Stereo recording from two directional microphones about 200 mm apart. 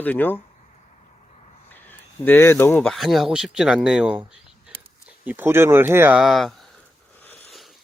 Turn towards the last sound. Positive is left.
turn(degrees=0)  # may be behind; listen again after turning